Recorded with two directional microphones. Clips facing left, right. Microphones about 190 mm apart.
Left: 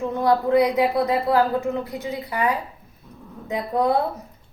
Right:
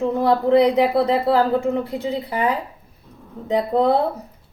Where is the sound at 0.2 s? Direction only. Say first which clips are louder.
Right 2 dB; 30° right (ahead or behind).